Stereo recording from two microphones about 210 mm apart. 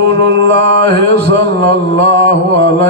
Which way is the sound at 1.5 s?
55° right (ahead or behind).